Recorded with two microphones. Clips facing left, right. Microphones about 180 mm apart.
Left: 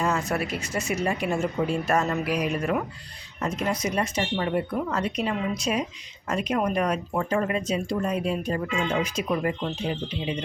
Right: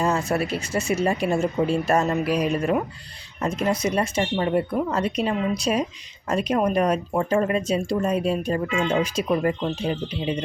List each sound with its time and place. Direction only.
0.0 s speech: 30° right (ahead or behind)